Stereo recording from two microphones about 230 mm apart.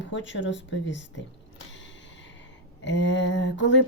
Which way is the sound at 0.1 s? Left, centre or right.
Left.